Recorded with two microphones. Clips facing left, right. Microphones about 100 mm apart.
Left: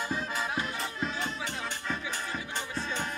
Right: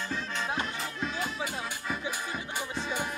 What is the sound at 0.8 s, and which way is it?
Music, centre (ahead or behind).